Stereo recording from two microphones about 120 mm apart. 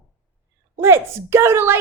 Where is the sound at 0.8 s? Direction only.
20° right (ahead or behind).